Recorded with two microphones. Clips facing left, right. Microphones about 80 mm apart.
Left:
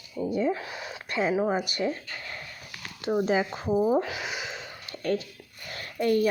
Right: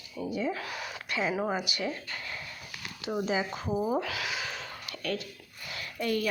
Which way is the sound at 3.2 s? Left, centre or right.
Left.